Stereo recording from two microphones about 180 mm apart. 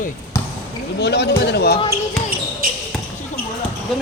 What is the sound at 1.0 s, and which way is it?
Speech, 65° left (ahead or behind).